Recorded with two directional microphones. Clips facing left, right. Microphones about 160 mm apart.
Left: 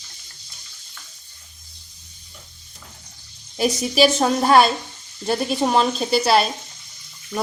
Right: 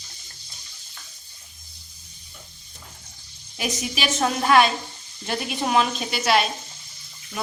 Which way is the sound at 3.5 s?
35° left (ahead or behind).